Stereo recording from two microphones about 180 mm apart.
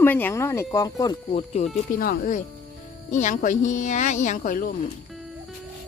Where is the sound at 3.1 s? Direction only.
45° left (ahead or behind).